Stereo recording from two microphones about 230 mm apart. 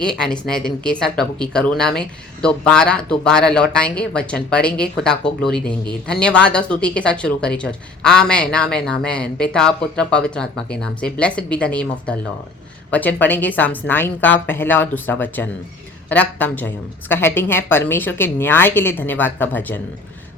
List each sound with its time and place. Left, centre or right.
0.0 s a woman's voice: centre